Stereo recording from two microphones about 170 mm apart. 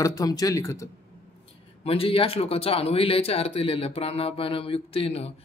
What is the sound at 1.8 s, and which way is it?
Speech, 35° left (ahead or behind).